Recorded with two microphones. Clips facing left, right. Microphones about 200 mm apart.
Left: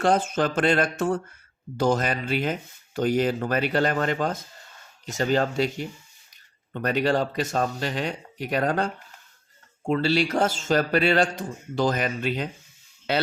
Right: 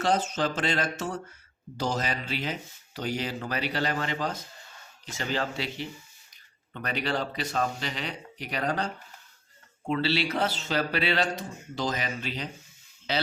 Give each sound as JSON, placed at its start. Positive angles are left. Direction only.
{"t": 0.0, "sound": "speech", "side_deg": 55}